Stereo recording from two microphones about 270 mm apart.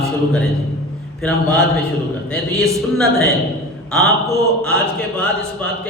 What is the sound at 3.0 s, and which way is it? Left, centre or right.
Speech, right.